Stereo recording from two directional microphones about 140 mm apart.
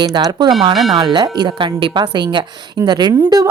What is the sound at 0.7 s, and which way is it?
Speech, centre (ahead or behind).